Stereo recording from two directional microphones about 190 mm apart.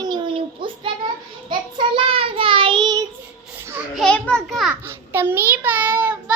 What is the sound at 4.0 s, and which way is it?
Speech, 5° left (ahead or behind).